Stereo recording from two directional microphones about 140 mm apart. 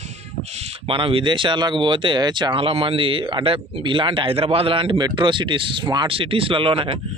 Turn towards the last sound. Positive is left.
turn(degrees=-40)  # may be behind; listen again after turning